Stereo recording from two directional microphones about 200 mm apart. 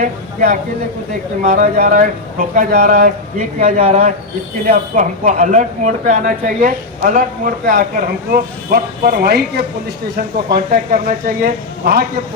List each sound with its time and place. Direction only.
0.0 s speech: 40° right (ahead or behind)